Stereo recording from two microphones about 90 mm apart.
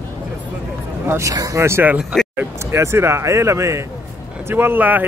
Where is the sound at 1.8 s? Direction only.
15° right (ahead or behind).